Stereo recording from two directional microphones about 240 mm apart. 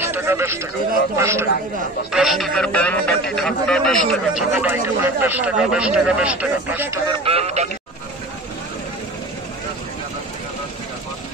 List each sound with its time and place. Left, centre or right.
0.0 s a man's voice: centre
7.1 s speech: right